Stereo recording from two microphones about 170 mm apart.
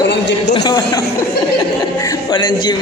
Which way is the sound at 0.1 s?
90° left.